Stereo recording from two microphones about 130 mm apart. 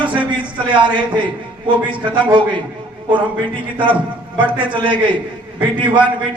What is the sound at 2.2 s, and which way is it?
Speech, 35° right (ahead or behind).